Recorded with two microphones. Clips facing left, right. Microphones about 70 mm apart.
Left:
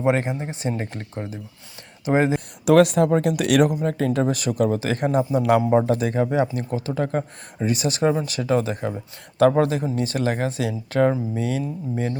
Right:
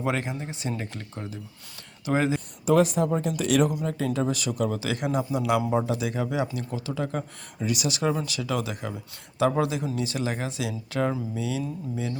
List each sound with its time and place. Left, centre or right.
0.0 s speech: left
2.6 s speech: left
3.8 s speech: left